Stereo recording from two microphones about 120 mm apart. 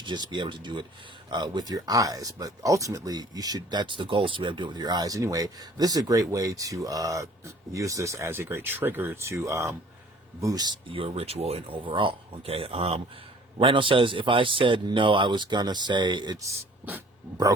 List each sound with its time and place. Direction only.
0.0 s speech: 40° right (ahead or behind)
10.9 s a man's voice: 55° right (ahead or behind)
16.8 s speech: 20° right (ahead or behind)